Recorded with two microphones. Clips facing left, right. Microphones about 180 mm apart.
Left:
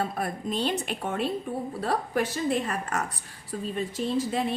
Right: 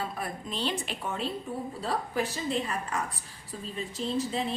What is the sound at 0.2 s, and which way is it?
A woman's voice, 40° left (ahead or behind).